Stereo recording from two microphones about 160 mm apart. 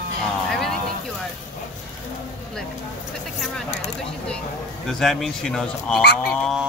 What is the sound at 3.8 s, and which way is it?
Speech, 5° left (ahead or behind).